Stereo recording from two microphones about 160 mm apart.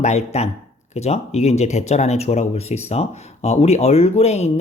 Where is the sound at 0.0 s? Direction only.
45° left (ahead or behind).